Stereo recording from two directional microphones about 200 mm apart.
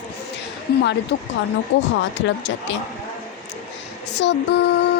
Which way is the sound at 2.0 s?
65° left (ahead or behind).